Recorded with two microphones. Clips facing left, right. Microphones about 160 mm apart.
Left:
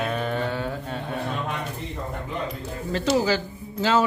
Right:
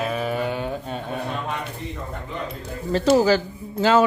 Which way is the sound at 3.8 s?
55° right (ahead or behind).